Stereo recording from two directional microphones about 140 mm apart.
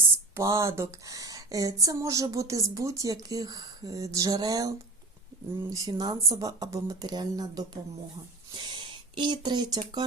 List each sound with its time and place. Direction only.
0.3 s speech: 20° right (ahead or behind)
5.7 s speech: 25° right (ahead or behind)